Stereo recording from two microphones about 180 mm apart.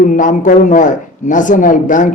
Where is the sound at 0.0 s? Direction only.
45° left (ahead or behind).